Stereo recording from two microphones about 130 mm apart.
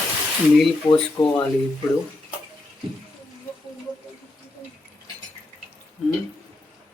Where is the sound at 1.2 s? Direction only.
30° left (ahead or behind).